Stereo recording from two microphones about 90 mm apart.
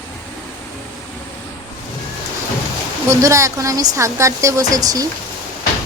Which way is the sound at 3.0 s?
35° right (ahead or behind).